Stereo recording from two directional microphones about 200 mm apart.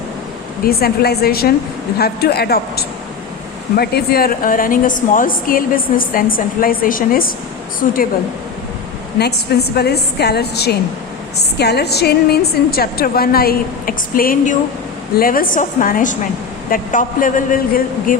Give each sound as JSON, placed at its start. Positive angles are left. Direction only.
{"t": 0.6, "sound": "a woman's voice", "side_deg": 50}
{"t": 9.1, "sound": "a woman's voice", "side_deg": 55}